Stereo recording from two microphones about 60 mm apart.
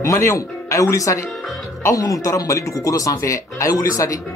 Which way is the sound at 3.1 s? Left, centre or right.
Left.